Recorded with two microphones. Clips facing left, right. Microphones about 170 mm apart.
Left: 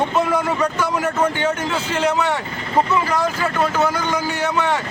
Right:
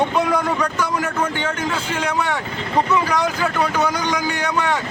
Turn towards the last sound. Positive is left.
turn(degrees=5)  # may be behind; listen again after turning